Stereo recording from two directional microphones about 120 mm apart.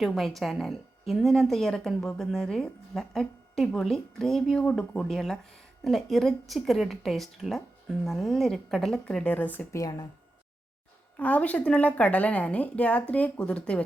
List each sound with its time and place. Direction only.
0.0 s a woman's voice: centre (ahead or behind)
9.7 s speech: 30° left (ahead or behind)
11.2 s a woman's voice: 10° left (ahead or behind)